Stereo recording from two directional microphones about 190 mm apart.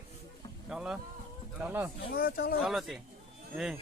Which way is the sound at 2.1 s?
50° left (ahead or behind).